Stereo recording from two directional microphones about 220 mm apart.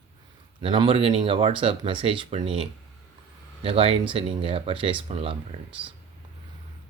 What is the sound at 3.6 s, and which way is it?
Speech, 25° right (ahead or behind).